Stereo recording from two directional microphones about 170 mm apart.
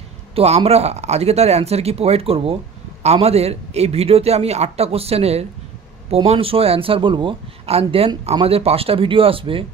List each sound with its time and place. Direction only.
0.3 s a man's voice: 35° right (ahead or behind)